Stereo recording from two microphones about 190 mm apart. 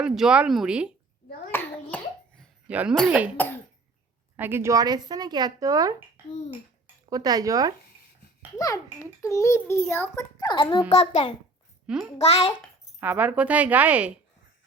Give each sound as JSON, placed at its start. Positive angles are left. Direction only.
{"t": 0.0, "sound": "speech", "side_deg": -5}
{"t": 1.5, "sound": "hands", "side_deg": 10}
{"t": 2.6, "sound": "a woman's voice", "side_deg": -5}
{"t": 4.4, "sound": "speech", "side_deg": -10}
{"t": 8.5, "sound": "a child's voice", "side_deg": 20}
{"t": 11.9, "sound": "speech", "side_deg": -5}
{"t": 12.2, "sound": "a child's voice", "side_deg": 30}
{"t": 13.0, "sound": "a woman's voice", "side_deg": -10}